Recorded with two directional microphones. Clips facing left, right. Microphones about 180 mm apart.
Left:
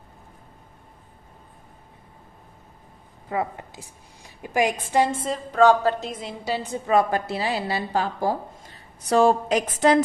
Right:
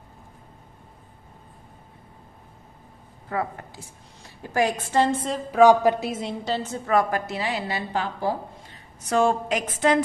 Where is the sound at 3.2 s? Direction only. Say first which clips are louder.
Left 1 dB; 20° left (ahead or behind).